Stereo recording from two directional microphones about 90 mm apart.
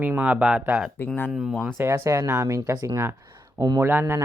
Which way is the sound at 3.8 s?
25° right (ahead or behind).